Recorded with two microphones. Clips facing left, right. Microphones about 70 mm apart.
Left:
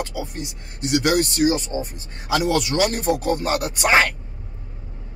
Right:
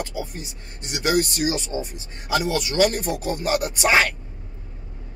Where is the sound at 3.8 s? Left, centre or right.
Left.